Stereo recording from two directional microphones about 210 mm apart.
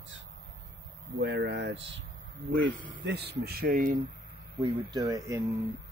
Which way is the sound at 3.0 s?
55° right (ahead or behind).